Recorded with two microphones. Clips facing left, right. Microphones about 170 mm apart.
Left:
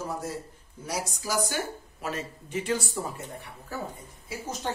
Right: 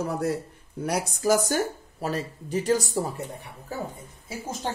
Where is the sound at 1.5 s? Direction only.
35° right (ahead or behind).